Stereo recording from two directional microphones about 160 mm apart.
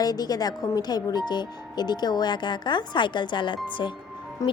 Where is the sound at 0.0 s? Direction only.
25° left (ahead or behind).